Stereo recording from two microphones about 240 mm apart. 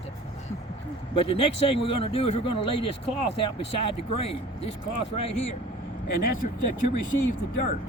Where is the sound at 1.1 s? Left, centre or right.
Left.